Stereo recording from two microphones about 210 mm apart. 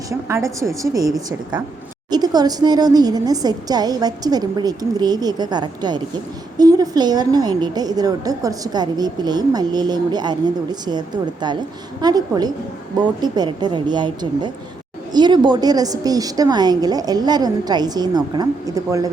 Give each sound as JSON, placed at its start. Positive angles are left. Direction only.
{"t": 0.1, "sound": "a woman's voice", "side_deg": -15}